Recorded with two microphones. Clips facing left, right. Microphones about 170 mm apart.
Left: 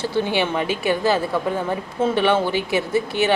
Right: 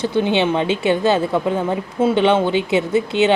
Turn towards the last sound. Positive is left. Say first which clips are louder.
# right 4 dB
turn(degrees=-20)  # may be behind; listen again after turning